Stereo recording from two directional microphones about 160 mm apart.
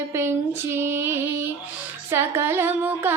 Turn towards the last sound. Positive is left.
turn(degrees=-15)  # may be behind; listen again after turning